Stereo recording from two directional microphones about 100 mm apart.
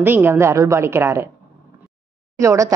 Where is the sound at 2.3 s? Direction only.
30° right (ahead or behind).